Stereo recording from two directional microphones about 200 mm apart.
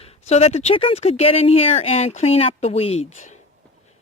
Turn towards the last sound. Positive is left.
turn(degrees=35)  # may be behind; listen again after turning